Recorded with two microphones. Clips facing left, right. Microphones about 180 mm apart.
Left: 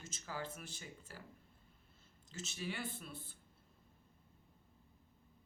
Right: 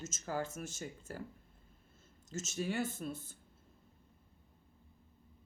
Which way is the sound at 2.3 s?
45° right (ahead or behind).